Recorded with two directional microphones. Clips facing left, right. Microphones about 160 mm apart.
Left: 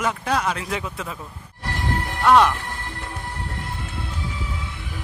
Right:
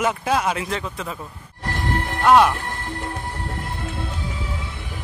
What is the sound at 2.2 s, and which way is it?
Speech, 5° right (ahead or behind).